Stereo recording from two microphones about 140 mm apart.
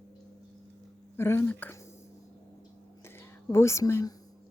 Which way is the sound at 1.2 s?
15° left (ahead or behind).